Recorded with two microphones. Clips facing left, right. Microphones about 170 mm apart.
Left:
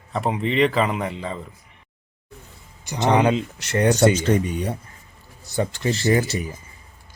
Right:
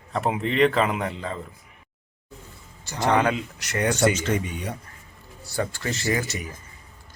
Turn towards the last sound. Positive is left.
turn(degrees=30)  # may be behind; listen again after turning